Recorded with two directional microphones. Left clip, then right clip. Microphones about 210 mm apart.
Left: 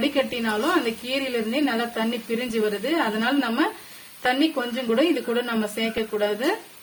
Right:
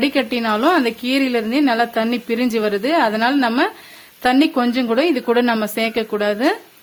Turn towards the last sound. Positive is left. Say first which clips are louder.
# right 6 dB
turn(degrees=-55)  # may be behind; listen again after turning